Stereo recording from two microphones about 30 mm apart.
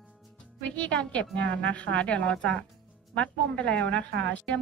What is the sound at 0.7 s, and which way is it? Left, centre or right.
A woman's voice, left.